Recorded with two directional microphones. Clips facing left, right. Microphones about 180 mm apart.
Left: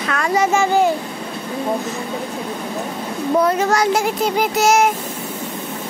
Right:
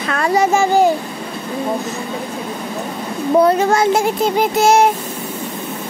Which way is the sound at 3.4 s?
25° right (ahead or behind).